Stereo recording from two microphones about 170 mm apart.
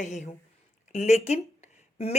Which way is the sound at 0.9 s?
40° left (ahead or behind).